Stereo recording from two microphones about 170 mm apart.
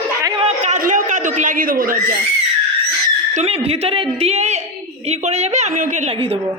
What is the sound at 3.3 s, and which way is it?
Speech, 35° right (ahead or behind).